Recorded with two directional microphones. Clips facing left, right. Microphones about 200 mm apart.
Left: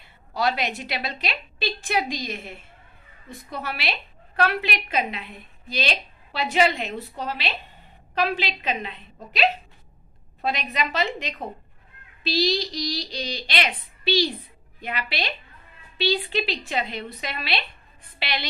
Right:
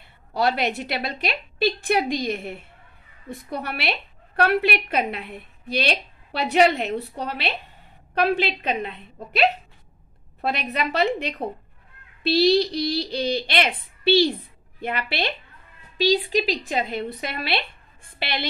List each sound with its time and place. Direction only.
0.3 s a woman's voice: 55° right (ahead or behind)
10.4 s a woman's voice: 60° right (ahead or behind)
16.0 s a woman's voice: 40° right (ahead or behind)